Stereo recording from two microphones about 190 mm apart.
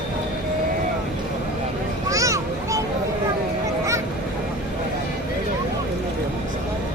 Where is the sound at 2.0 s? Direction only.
15° right (ahead or behind).